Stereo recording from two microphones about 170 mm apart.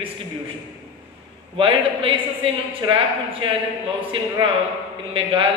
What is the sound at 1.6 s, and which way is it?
A man's voice, 30° right (ahead or behind).